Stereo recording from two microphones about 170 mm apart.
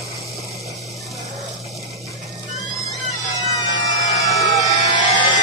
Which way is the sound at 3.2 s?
20° left (ahead or behind).